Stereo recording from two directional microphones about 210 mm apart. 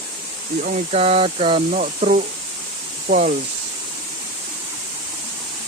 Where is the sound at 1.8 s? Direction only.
35° right (ahead or behind).